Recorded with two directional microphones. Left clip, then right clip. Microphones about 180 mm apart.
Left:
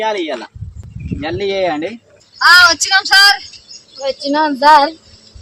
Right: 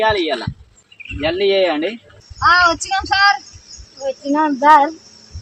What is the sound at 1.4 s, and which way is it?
Speech, 40° left (ahead or behind).